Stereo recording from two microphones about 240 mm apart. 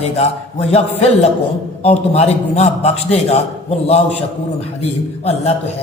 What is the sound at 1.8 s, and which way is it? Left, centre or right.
A man's voice, left.